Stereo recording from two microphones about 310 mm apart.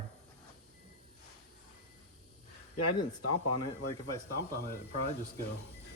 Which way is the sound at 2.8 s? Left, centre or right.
Left.